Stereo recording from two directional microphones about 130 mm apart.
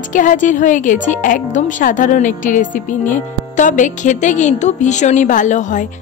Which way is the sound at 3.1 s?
75° left (ahead or behind).